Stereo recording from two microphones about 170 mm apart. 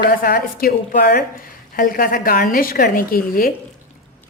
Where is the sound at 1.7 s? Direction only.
55° left (ahead or behind).